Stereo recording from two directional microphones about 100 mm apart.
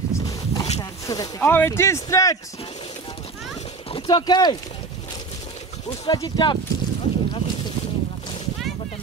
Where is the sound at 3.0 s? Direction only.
65° left (ahead or behind).